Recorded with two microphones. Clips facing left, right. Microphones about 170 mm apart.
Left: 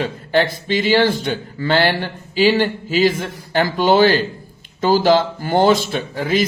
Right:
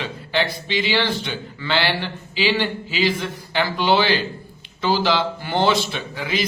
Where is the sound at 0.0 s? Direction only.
45° left (ahead or behind).